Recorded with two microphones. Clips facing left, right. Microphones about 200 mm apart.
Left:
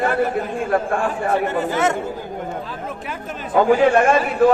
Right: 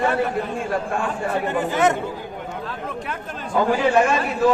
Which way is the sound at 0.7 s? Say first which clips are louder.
Left 6 dB; 55° left (ahead or behind).